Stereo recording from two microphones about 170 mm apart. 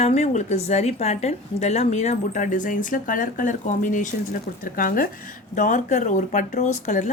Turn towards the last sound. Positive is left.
turn(degrees=45)  # may be behind; listen again after turning